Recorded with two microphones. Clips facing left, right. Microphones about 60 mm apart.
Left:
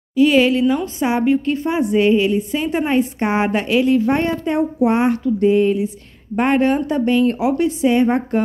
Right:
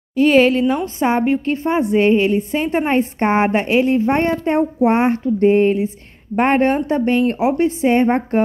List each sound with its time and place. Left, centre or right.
0.1 s speech: right